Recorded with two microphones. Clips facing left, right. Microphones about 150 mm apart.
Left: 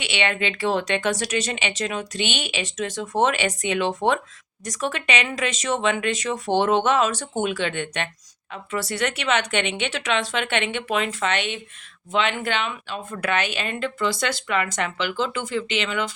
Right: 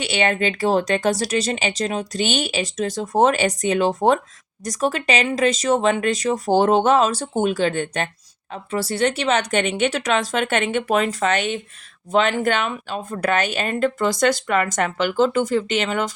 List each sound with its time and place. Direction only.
0.0 s speech: 40° right (ahead or behind)